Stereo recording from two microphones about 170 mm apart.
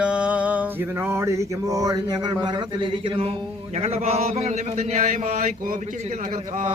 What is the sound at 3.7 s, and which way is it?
Mantra, 40° right (ahead or behind).